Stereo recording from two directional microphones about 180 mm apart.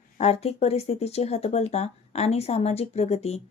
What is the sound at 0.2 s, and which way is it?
Speech, 35° left (ahead or behind).